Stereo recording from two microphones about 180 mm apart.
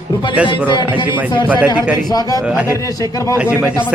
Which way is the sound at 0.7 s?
25° left (ahead or behind).